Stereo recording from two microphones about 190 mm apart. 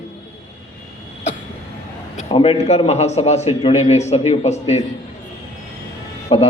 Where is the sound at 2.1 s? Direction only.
30° left (ahead or behind).